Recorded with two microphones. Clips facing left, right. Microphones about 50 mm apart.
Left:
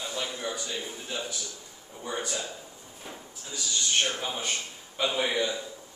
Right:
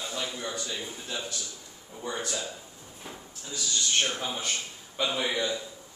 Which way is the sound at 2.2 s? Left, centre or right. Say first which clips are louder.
Even; centre.